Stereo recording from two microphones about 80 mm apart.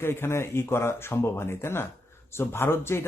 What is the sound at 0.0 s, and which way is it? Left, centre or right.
Speech, left.